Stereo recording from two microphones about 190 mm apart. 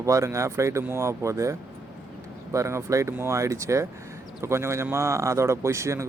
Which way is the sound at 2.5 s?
15° right (ahead or behind).